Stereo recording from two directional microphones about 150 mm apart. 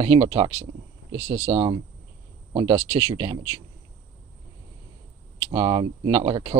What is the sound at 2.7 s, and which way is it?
Speech, 20° right (ahead or behind).